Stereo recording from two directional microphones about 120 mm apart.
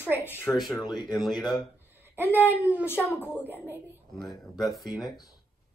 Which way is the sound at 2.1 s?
15° right (ahead or behind).